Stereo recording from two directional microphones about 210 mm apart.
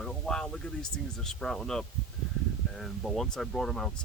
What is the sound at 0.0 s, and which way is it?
Speech, 5° left (ahead or behind).